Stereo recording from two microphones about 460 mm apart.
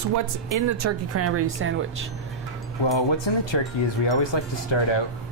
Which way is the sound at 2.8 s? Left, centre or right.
Left.